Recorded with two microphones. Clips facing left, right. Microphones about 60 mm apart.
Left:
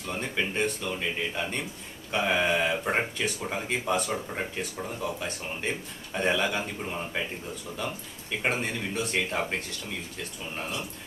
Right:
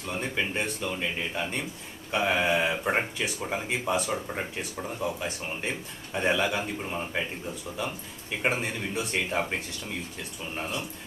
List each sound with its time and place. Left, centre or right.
0.1 s speech: centre
8.4 s speech: centre